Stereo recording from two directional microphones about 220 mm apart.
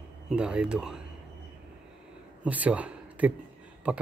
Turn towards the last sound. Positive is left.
turn(degrees=-5)  # may be behind; listen again after turning